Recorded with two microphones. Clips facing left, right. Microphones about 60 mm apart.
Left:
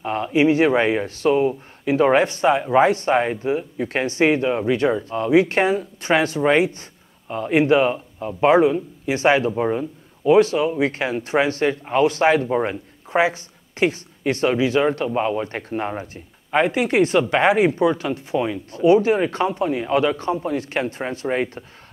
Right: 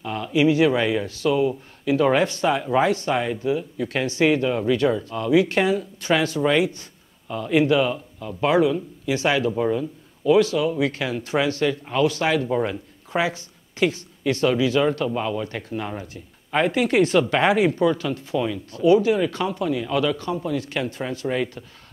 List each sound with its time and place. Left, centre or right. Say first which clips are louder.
0.0 s speech: left 2 dB; left
16.6 s speech: right 1 dB; centre; by 21.6 s left